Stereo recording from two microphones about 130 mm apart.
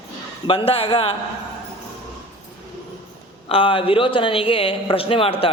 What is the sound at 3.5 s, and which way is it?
A man's voice, 40° left (ahead or behind).